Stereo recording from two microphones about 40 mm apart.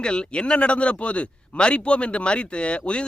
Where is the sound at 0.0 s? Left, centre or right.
Left.